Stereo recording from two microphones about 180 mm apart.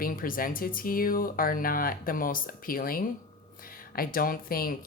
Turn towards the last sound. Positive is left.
turn(degrees=55)  # may be behind; listen again after turning